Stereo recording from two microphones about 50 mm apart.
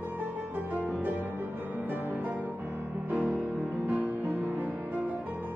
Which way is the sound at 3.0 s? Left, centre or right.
Right.